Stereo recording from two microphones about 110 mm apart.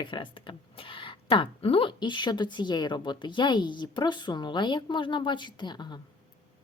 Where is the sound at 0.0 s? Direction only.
45° left (ahead or behind).